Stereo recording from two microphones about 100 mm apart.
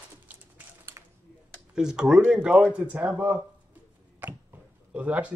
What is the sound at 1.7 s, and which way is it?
A man's voice, 5° right (ahead or behind).